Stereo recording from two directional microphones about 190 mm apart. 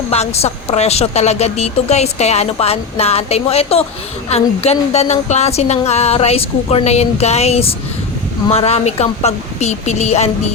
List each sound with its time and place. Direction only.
0.1 s a woman's voice: 35° left (ahead or behind)